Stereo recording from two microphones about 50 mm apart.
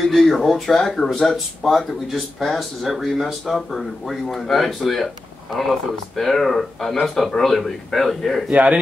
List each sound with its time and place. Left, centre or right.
0.0 s speech: centre
8.5 s a man's voice: right